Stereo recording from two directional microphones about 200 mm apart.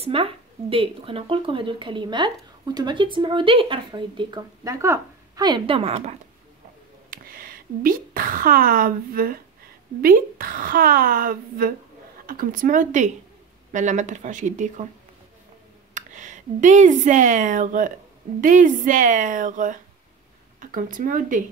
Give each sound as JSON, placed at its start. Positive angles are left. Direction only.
{"t": 0.0, "sound": "speech", "side_deg": -30}
{"t": 7.1, "sound": "speech", "side_deg": -45}
{"t": 15.9, "sound": "speech", "side_deg": -40}